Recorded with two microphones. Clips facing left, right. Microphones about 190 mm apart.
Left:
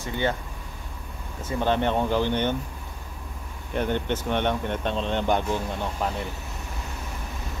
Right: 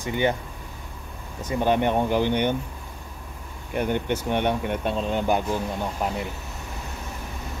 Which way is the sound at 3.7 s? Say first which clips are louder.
Right 1 dB; 10° right (ahead or behind).